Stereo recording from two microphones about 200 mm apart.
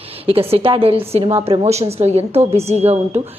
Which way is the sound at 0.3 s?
30° right (ahead or behind).